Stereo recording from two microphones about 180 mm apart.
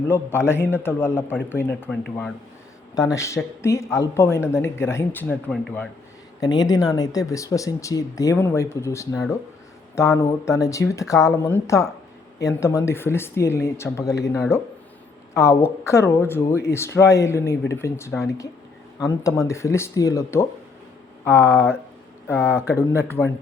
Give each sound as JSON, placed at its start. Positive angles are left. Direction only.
{"t": 0.1, "sound": "speech", "side_deg": 15}
{"t": 3.1, "sound": "speech", "side_deg": 15}
{"t": 6.4, "sound": "speech", "side_deg": 20}